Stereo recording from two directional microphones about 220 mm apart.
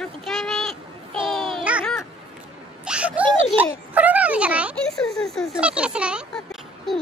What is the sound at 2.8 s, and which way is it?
Speech, 5° right (ahead or behind).